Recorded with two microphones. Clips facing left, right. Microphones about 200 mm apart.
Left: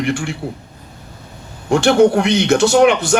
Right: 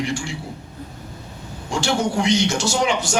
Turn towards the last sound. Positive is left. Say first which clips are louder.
# left 10 dB
turn(degrees=60)  # may be behind; listen again after turning